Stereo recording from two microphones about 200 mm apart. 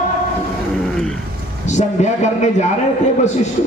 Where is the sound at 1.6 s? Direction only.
35° left (ahead or behind).